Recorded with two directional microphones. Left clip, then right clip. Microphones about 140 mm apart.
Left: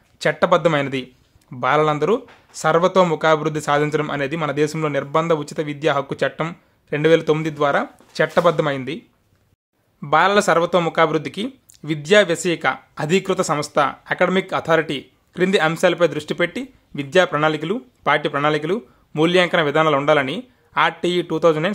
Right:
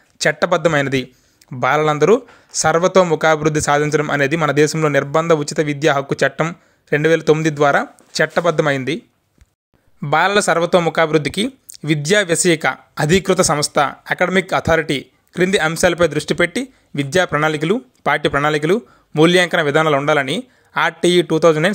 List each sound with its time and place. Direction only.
0.2 s speech: 25° right (ahead or behind)
10.0 s speech: 35° right (ahead or behind)